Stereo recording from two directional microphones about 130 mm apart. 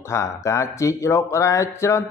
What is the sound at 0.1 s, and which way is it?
Speech, 20° left (ahead or behind).